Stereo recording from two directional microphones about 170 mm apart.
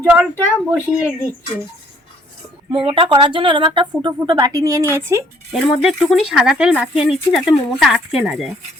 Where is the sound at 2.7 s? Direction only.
30° right (ahead or behind); by 5.2 s 15° right (ahead or behind).